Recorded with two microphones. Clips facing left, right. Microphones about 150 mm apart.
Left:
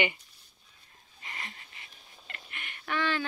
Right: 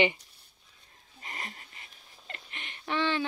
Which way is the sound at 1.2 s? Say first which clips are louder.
Right 2 dB; 40° right (ahead or behind).